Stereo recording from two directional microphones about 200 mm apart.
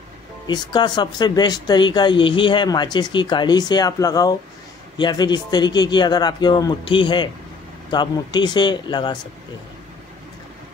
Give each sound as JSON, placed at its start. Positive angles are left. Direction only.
{"t": 0.5, "sound": "speech", "side_deg": 20}